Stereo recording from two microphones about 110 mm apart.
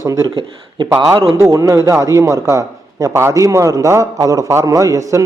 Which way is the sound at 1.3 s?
25° right (ahead or behind).